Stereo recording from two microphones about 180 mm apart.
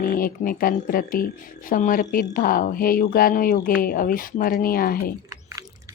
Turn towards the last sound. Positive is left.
turn(degrees=55)  # may be behind; listen again after turning